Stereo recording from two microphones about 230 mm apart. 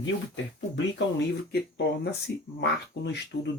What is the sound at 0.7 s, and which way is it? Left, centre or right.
Speech, left.